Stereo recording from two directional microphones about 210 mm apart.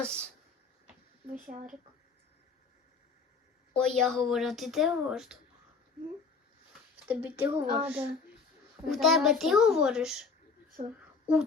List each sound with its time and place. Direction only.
0.0 s speech: 5° left (ahead or behind)
1.5 s speech: 40° right (ahead or behind)
3.8 s speech: 5° left (ahead or behind)
7.1 s speech: 10° right (ahead or behind)
10.8 s speech: 30° right (ahead or behind)